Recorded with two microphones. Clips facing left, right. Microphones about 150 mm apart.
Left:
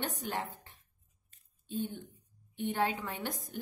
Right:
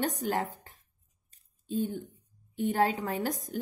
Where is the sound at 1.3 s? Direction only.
40° right (ahead or behind).